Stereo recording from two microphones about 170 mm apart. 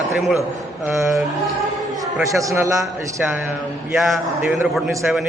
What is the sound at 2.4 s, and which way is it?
Speech, 20° right (ahead or behind).